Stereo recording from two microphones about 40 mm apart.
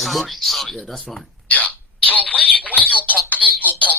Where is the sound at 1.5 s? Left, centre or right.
Left.